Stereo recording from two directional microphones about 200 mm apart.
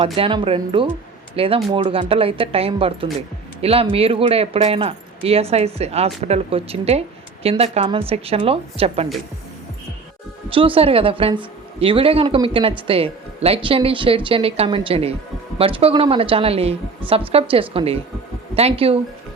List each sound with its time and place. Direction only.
0.0 s a woman's voice: 25° right (ahead or behind)
10.5 s a woman's voice: 25° right (ahead or behind)